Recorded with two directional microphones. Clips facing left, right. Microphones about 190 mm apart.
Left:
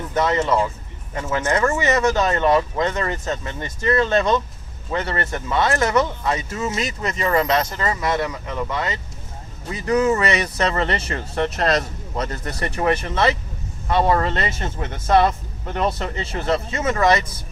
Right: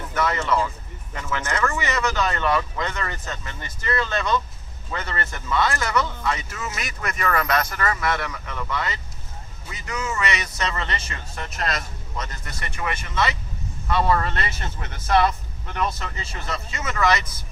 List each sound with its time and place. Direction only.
0.1 s speech: 25° left (ahead or behind)
9.6 s speech: 35° left (ahead or behind)
15.3 s speech: 35° left (ahead or behind)